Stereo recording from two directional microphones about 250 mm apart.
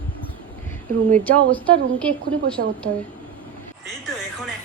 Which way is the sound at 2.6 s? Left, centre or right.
Right.